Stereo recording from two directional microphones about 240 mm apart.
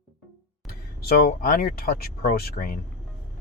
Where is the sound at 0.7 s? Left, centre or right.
Left.